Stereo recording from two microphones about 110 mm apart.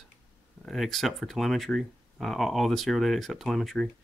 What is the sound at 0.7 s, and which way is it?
Speech, centre (ahead or behind).